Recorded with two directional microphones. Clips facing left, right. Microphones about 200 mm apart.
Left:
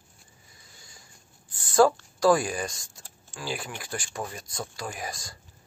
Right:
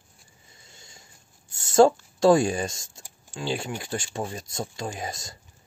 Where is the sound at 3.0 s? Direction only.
15° right (ahead or behind).